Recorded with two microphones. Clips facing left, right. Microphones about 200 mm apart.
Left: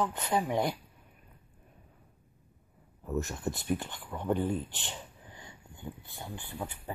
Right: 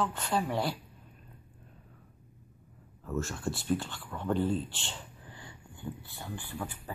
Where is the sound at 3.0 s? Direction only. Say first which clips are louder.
Left 1 dB; 20° left (ahead or behind).